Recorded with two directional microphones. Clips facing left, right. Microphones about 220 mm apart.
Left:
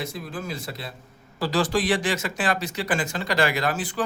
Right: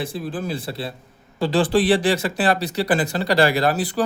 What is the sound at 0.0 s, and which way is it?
Speech, 30° right (ahead or behind).